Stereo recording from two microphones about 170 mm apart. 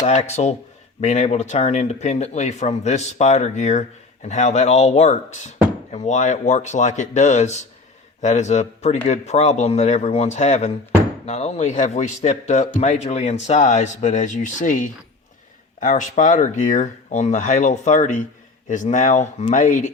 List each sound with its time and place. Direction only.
0.0 s speech: 40° left (ahead or behind)